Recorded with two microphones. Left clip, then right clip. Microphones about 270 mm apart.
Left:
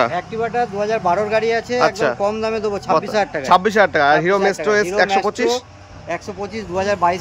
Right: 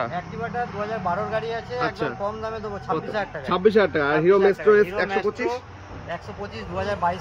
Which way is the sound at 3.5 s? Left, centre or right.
Centre.